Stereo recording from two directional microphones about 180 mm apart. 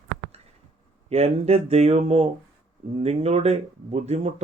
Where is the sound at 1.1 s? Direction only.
35° right (ahead or behind).